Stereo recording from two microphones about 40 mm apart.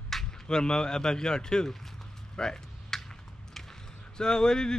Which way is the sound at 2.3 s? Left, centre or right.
Centre.